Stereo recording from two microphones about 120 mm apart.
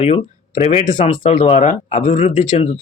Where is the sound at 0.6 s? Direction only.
75° left (ahead or behind).